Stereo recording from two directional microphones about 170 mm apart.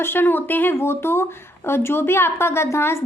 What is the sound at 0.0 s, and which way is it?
A woman's voice, 10° left (ahead or behind).